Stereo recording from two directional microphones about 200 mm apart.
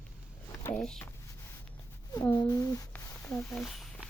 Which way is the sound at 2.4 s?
20° left (ahead or behind).